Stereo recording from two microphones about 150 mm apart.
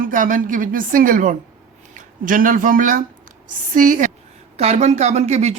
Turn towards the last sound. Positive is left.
turn(degrees=-45)  # may be behind; listen again after turning